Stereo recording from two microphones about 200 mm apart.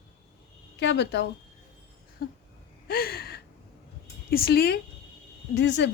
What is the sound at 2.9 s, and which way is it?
Gasp, 50° left (ahead or behind).